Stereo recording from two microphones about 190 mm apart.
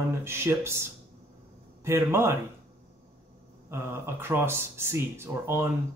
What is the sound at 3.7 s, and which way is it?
Speech, 15° right (ahead or behind).